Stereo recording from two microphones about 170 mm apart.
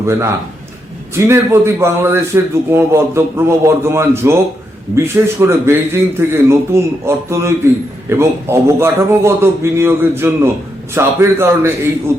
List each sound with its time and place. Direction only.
0.0 s a man's voice: 15° right (ahead or behind)